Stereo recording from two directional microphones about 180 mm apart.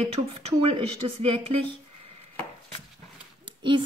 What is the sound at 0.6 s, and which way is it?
A woman's voice, 30° right (ahead or behind).